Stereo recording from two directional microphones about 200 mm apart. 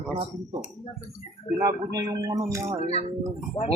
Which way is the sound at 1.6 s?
20° right (ahead or behind).